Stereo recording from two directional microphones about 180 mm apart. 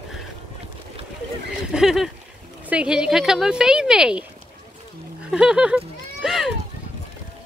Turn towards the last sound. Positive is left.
turn(degrees=0)  # may be behind; listen again after turning